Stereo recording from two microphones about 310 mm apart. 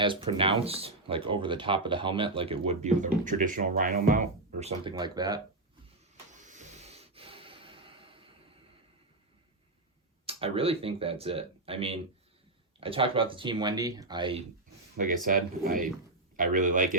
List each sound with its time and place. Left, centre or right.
0.0 s speech: centre
6.3 s snort: right
10.2 s speech: centre
14.9 s speech: right